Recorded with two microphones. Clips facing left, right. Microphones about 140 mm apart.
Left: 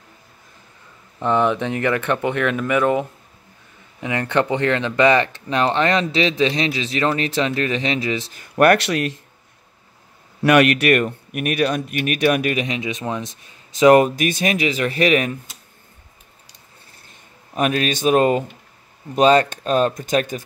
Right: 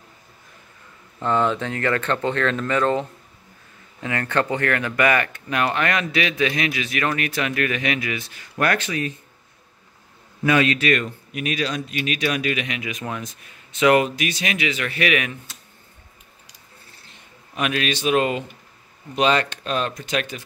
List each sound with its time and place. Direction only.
1.2 s speech: 20° left (ahead or behind); by 8.5 s 35° left (ahead or behind)
8.5 s speech: 70° left (ahead or behind)
10.4 s speech: 65° left (ahead or behind); by 12.6 s 50° left (ahead or behind)
12.6 s speech: 30° left (ahead or behind)
17.1 s speech: 40° left (ahead or behind)